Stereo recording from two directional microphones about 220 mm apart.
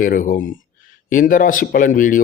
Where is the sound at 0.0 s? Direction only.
35° left (ahead or behind).